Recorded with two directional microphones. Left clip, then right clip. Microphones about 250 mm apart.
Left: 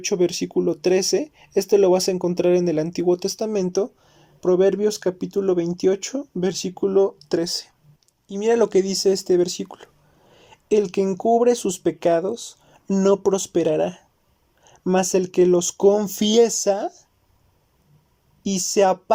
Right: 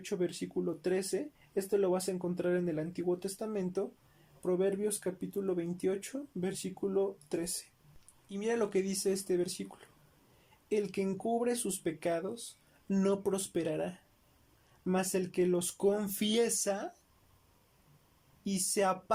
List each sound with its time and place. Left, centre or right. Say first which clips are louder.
0.0 s speech: left 15 dB; left
15.1 s speech: left 15 dB; left
18.7 s speech: left 14 dB; left